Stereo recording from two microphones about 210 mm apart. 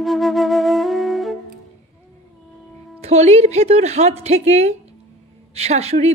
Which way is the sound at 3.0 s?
30° right (ahead or behind).